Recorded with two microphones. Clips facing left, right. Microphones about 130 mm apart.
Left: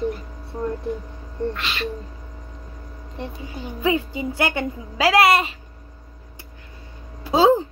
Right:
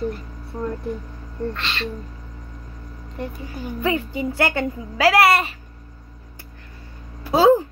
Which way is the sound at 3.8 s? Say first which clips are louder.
Left 1 dB; 15° left (ahead or behind).